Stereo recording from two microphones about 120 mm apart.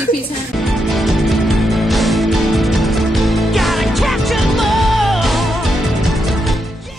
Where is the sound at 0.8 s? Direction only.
Centre (ahead or behind).